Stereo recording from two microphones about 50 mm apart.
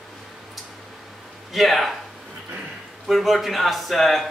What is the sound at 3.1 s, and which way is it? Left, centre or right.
Speech, centre.